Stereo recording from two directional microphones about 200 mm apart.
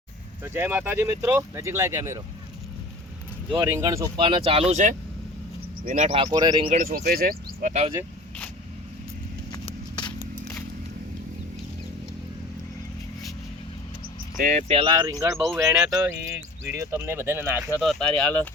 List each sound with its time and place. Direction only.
0.4 s speech: 10° right (ahead or behind)
3.5 s speech: 15° right (ahead or behind); by 6.1 s 40° right (ahead or behind)
6.1 s speech: 20° right (ahead or behind)
6.7 s speech: 40° right (ahead or behind)
9.5 s a sound: 20° left (ahead or behind)
14.3 s speech: 40° right (ahead or behind); by 17.7 s 10° right (ahead or behind)
17.7 s speech: centre (ahead or behind)